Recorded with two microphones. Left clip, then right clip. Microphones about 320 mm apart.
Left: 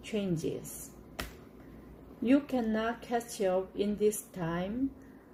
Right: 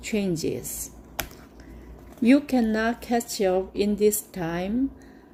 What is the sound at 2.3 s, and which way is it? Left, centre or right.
A woman's voice, right.